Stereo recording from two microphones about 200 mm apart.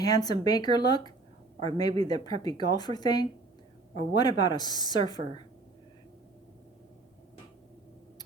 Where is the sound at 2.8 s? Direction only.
20° left (ahead or behind).